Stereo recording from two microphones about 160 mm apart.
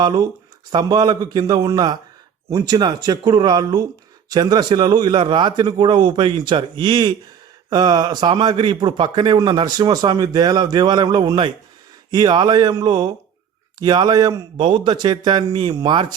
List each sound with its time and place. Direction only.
0.0 s a man's voice: 25° right (ahead or behind)